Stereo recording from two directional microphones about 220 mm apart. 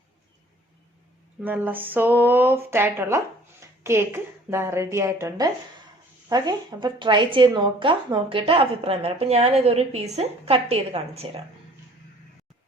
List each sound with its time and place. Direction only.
1.4 s a woman's voice: 10° right (ahead or behind); by 11.3 s 25° right (ahead or behind)